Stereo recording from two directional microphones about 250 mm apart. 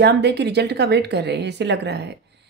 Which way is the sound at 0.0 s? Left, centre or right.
Right.